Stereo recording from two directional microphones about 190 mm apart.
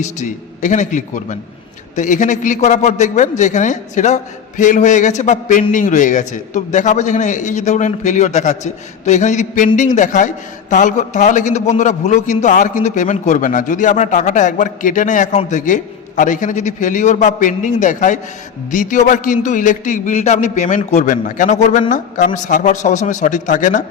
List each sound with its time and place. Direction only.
0.0 s a man's voice: 40° left (ahead or behind)